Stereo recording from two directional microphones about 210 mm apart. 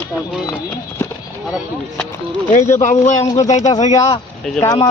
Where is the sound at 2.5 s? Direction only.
35° left (ahead or behind).